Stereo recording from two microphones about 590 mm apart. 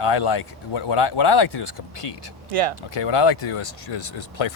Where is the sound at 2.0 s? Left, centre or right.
Left.